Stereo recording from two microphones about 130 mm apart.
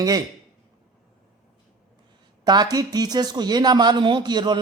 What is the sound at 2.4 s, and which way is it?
Speech, 30° right (ahead or behind).